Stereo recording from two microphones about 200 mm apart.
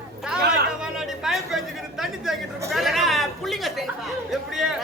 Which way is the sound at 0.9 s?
Centre (ahead or behind).